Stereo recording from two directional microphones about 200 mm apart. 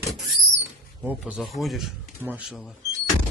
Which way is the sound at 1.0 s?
5° right (ahead or behind).